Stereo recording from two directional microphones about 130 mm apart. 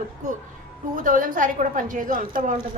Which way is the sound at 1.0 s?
90° right.